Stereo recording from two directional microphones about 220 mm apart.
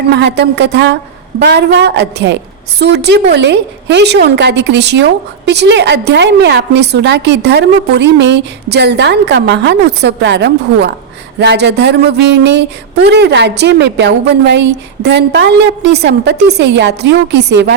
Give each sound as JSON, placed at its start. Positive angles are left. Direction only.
{"t": 0.1, "sound": "a woman's voice", "side_deg": -50}